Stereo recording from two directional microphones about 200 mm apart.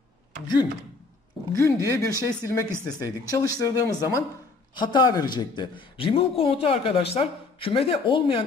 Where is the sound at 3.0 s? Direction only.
15° left (ahead or behind).